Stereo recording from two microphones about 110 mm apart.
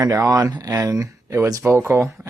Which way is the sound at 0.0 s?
35° right (ahead or behind).